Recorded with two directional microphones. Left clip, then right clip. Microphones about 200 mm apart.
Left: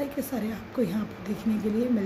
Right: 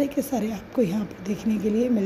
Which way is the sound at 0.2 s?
25° right (ahead or behind).